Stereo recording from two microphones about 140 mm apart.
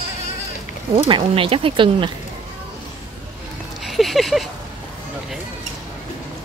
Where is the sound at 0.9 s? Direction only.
40° right (ahead or behind).